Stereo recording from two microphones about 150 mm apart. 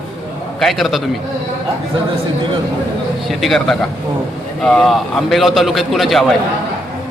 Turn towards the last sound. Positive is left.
turn(degrees=0)  # may be behind; listen again after turning